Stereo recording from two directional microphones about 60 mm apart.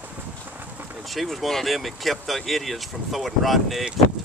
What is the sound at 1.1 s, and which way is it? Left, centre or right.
Speech, centre.